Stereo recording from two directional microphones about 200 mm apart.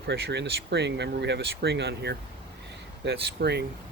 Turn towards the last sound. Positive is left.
turn(degrees=-55)  # may be behind; listen again after turning